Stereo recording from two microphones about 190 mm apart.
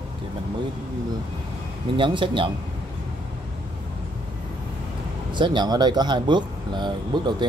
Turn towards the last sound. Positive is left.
turn(degrees=-25)  # may be behind; listen again after turning